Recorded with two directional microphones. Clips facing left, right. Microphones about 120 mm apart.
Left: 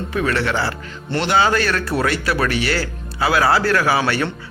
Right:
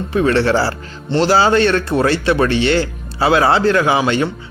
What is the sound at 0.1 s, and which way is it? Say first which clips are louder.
A man's voice: right 7 dB; 30° right (ahead or behind).